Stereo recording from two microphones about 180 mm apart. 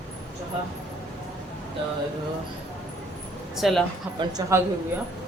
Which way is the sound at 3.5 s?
Centre (ahead or behind).